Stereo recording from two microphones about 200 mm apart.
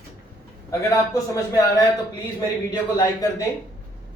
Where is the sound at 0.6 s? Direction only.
15° left (ahead or behind).